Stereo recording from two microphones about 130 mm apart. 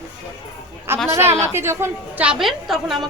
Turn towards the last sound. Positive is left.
turn(degrees=0)  # may be behind; listen again after turning